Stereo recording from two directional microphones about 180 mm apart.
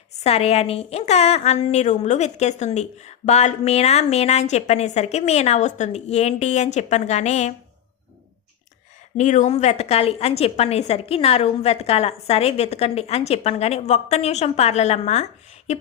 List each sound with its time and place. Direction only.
0.2 s a woman's voice: 35° left (ahead or behind)
9.1 s a woman's voice: 45° left (ahead or behind)